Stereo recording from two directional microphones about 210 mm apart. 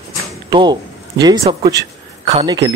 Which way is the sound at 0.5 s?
20° right (ahead or behind).